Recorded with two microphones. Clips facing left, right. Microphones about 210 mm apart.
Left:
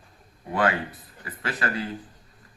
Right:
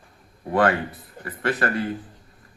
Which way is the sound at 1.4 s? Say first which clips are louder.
Right 5 dB; 50° right (ahead or behind).